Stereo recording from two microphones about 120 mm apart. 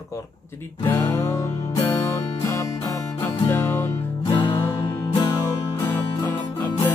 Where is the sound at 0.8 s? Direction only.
20° left (ahead or behind).